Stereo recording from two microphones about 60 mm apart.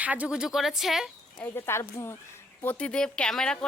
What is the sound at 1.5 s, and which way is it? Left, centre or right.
Speech, left.